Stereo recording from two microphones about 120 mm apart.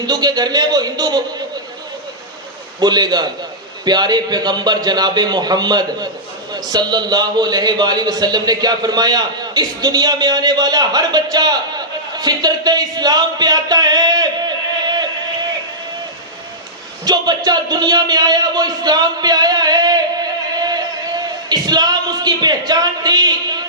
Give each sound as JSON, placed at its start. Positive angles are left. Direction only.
{"t": 0.0, "sound": "a man's voice", "side_deg": -35}
{"t": 2.8, "sound": "a man's voice", "side_deg": -35}
{"t": 17.1, "sound": "speech", "side_deg": -35}